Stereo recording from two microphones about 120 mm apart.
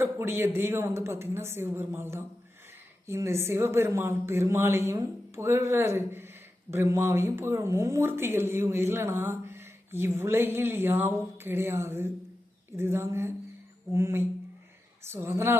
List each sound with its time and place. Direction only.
0.0 s speech: 20° right (ahead or behind)